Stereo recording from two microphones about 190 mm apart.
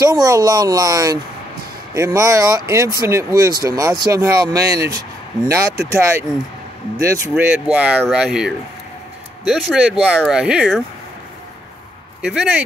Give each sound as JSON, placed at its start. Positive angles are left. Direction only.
{"t": 0.0, "sound": "speech", "side_deg": -15}
{"t": 12.2, "sound": "speech", "side_deg": -5}